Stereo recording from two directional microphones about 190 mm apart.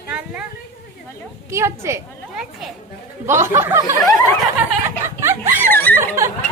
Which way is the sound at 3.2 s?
15° right (ahead or behind).